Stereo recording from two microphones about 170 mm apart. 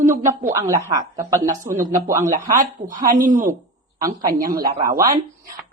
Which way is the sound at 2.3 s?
50° right (ahead or behind).